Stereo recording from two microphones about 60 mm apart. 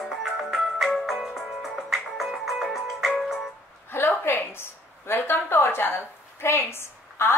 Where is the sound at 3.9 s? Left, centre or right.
Left.